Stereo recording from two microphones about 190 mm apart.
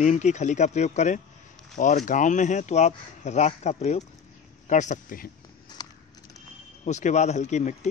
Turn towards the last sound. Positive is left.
turn(degrees=40)  # may be behind; listen again after turning